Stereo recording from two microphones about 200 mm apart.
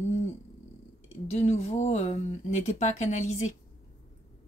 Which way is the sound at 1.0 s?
30° left (ahead or behind).